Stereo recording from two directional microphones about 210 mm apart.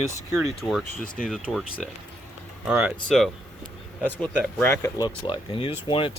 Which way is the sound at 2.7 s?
5° right (ahead or behind).